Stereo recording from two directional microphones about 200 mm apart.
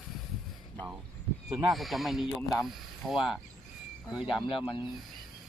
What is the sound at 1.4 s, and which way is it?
Speech, centre (ahead or behind).